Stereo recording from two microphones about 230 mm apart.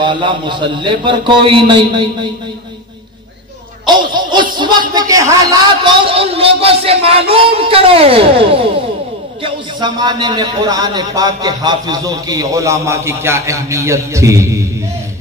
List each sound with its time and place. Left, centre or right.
0.0 s speech: right
4.1 s a man's voice: centre